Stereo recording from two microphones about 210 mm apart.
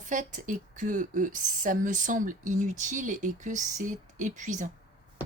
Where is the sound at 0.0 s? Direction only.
35° right (ahead or behind).